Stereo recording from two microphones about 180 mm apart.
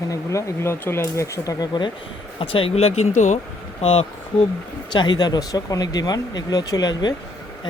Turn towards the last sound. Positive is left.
turn(degrees=20)  # may be behind; listen again after turning